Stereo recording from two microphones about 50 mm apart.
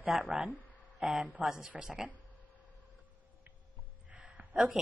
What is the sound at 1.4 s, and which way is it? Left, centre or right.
Speech, right.